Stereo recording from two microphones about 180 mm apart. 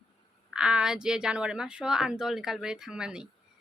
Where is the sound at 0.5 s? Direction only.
5° right (ahead or behind).